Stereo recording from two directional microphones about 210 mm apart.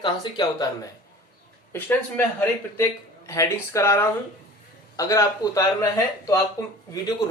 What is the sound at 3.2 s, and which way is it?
Speech, 15° left (ahead or behind).